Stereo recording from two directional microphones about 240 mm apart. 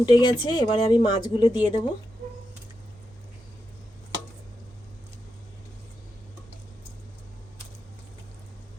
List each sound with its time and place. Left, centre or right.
0.0 s speech: centre